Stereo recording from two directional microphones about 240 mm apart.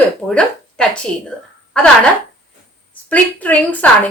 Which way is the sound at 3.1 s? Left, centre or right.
Centre.